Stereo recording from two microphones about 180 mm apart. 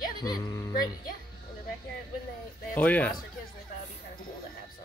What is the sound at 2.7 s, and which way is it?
Speech, 10° left (ahead or behind).